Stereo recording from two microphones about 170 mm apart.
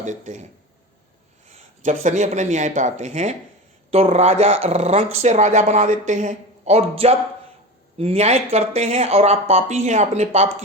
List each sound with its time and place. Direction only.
0.0 s speech: 45° right (ahead or behind)
1.5 s speech: 45° right (ahead or behind)